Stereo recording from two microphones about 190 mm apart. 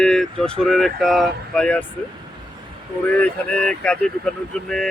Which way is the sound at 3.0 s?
5° left (ahead or behind).